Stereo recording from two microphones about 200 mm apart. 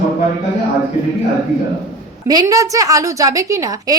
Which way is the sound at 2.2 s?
20° right (ahead or behind).